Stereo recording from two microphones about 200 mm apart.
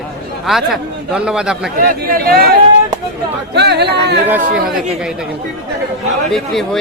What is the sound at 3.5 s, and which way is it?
Speech, 55° right (ahead or behind).